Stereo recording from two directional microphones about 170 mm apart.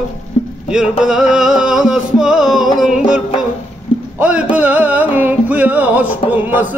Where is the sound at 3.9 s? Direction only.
30° left (ahead or behind).